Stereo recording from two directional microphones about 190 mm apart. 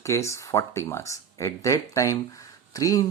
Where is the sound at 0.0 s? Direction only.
15° left (ahead or behind).